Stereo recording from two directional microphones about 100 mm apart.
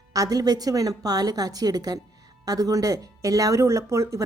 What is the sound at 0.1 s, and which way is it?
A woman's voice, 35° right (ahead or behind).